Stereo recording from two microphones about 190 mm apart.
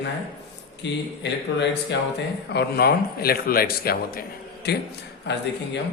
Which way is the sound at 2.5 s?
60° left (ahead or behind).